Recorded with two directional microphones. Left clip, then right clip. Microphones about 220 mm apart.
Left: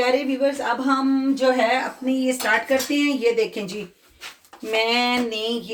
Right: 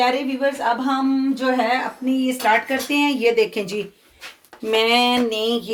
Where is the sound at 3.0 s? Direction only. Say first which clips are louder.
Right 3 dB; 35° right (ahead or behind).